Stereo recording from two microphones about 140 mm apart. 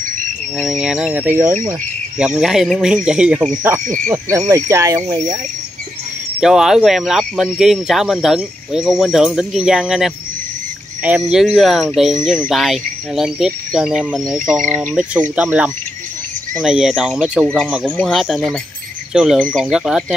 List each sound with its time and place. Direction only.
0.6 s speech: 5° right (ahead or behind); by 5.4 s 25° right (ahead or behind)
6.4 s speech: 5° right (ahead or behind)